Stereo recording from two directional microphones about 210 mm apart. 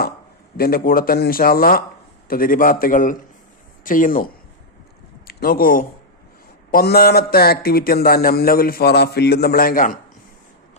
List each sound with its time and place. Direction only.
0.5 s speech: 45° left (ahead or behind)
5.3 s speech: 45° left (ahead or behind)